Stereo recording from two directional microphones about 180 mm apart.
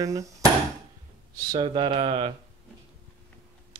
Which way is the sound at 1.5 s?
25° right (ahead or behind).